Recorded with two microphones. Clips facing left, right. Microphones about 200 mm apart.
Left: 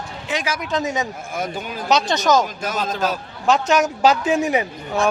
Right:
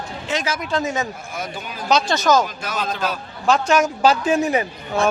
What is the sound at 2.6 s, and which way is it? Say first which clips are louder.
Speech: left 2 dB; 45° left (ahead or behind).